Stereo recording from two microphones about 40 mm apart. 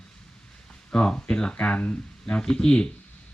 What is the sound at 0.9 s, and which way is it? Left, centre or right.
Speech, left.